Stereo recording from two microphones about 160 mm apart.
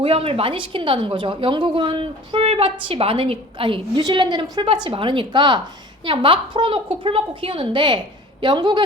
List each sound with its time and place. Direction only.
0.0 s a woman's voice: 35° right (ahead or behind)